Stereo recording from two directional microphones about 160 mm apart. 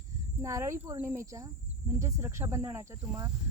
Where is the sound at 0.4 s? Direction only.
20° right (ahead or behind).